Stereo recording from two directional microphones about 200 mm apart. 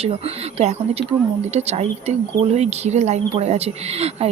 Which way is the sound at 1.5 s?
30° right (ahead or behind).